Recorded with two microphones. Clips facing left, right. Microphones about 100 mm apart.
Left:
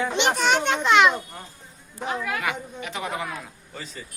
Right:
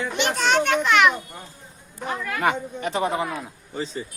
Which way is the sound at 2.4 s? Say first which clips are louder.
Right 6 dB; 40° right (ahead or behind).